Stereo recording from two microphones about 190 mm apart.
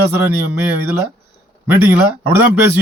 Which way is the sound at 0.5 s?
10° right (ahead or behind).